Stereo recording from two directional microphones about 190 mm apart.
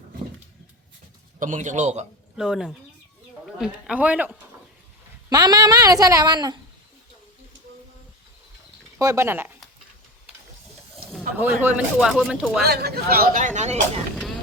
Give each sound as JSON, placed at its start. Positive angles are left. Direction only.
{"t": 1.4, "sound": "a man's voice", "side_deg": -40}
{"t": 2.3, "sound": "speech", "side_deg": -5}
{"t": 5.3, "sound": "a woman's voice", "side_deg": -20}
{"t": 9.0, "sound": "speech", "side_deg": -15}
{"t": 11.3, "sound": "speech", "side_deg": -10}
{"t": 12.6, "sound": "speech", "side_deg": -55}